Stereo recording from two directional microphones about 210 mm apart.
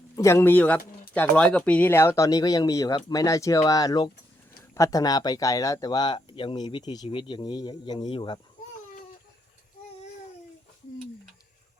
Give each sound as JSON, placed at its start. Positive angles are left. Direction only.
{"t": 0.2, "sound": "speech", "side_deg": 15}